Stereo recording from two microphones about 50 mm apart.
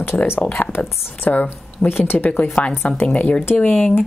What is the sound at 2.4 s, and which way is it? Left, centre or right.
Speech, left.